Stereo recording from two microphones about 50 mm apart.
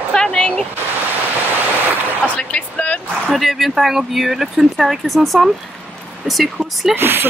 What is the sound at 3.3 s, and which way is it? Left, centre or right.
Speech, centre.